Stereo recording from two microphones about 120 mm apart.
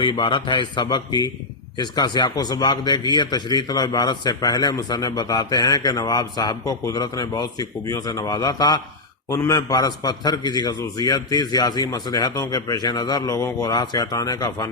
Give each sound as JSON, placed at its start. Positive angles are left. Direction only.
{"t": 0.0, "sound": "a man's voice", "side_deg": 40}